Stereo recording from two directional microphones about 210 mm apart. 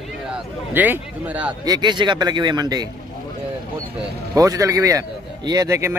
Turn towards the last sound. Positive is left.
turn(degrees=-15)  # may be behind; listen again after turning